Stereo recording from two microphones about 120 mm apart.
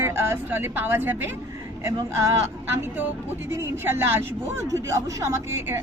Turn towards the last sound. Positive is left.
turn(degrees=-20)  # may be behind; listen again after turning